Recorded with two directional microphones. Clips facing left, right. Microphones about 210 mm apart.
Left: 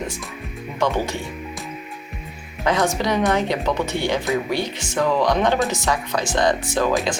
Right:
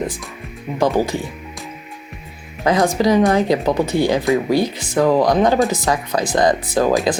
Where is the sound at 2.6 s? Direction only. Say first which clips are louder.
Right 5 dB; 35° right (ahead or behind).